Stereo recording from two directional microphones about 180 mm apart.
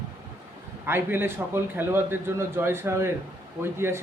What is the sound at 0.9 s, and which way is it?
A man's voice, 10° right (ahead or behind).